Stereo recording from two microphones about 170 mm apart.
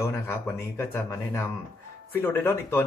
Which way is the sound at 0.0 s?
15° left (ahead or behind).